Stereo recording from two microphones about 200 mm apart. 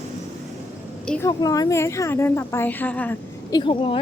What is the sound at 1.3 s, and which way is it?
A woman's voice, 20° left (ahead or behind).